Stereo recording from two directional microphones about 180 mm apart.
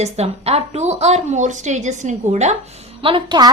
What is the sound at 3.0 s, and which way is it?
Speech, 25° right (ahead or behind).